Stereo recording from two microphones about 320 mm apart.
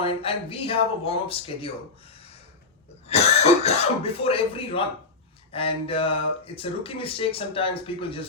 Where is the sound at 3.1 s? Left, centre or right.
Centre.